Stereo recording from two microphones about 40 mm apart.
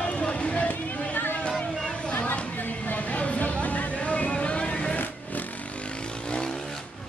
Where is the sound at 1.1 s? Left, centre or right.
Left.